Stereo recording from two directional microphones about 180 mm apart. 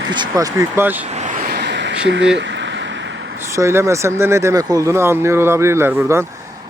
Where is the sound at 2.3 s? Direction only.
85° right.